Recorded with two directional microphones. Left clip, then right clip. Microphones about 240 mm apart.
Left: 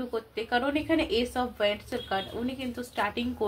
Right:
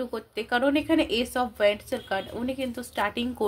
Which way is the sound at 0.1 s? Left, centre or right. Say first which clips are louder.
Left 3 dB; right.